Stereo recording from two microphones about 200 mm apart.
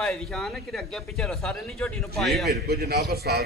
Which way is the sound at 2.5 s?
55° right (ahead or behind).